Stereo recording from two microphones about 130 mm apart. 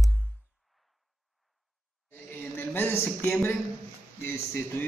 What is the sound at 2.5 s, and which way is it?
A man's voice, 15° left (ahead or behind).